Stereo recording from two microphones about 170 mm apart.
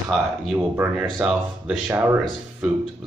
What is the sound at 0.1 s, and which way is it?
Speech, centre (ahead or behind).